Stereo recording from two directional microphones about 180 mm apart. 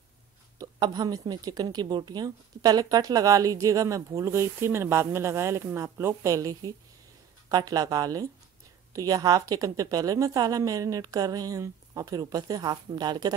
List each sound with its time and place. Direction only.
0.6 s speech: 20° right (ahead or behind)